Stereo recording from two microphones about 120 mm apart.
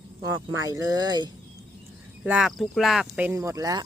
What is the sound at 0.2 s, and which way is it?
Speech, 30° right (ahead or behind).